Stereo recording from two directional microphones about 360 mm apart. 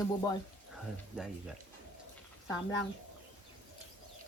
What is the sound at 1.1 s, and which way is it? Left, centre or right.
Speech, centre.